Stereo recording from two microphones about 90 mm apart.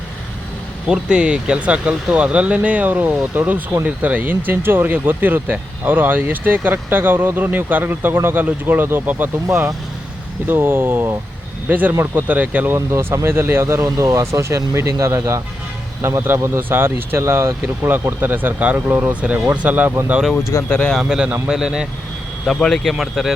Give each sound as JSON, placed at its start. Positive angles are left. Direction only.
{"t": 0.9, "sound": "speech", "side_deg": -10}
{"t": 12.7, "sound": "speech", "side_deg": -30}
{"t": 20.7, "sound": "speech", "side_deg": 15}
{"t": 21.0, "sound": "speech", "side_deg": -10}
{"t": 22.4, "sound": "speech", "side_deg": 5}